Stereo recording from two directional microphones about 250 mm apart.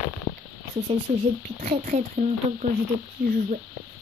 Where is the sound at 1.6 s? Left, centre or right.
Right.